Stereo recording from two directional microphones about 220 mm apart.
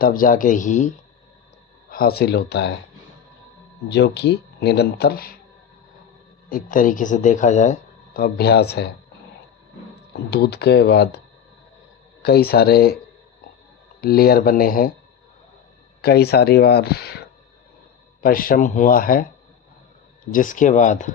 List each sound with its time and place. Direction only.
0.0 s speech: 40° left (ahead or behind)
3.8 s speech: 50° left (ahead or behind)
6.5 s speech: 40° left (ahead or behind)
10.1 s speech: 45° left (ahead or behind)
12.2 s speech: 45° left (ahead or behind)
14.0 s speech: 45° left (ahead or behind)
16.0 s speech: 45° left (ahead or behind)
20.3 s speech: 35° left (ahead or behind)